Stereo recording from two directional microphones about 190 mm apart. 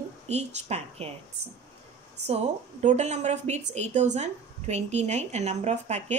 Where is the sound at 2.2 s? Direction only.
35° right (ahead or behind).